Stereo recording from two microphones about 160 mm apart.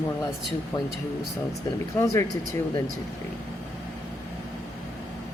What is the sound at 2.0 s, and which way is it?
Speech, 20° left (ahead or behind).